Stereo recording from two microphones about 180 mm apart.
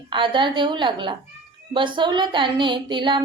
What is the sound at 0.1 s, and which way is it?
Speech, 25° right (ahead or behind).